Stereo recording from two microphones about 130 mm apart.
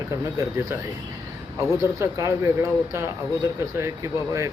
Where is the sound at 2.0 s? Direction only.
25° right (ahead or behind).